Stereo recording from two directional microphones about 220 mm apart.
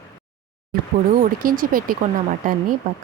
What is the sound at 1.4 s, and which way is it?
A woman's voice, 40° right (ahead or behind).